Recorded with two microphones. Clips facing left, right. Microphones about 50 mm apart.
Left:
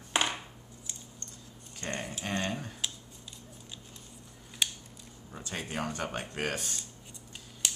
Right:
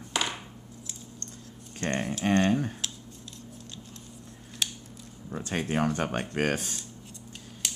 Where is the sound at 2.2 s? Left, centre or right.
Right.